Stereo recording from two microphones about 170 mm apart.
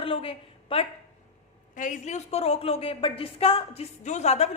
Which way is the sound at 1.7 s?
50° left (ahead or behind).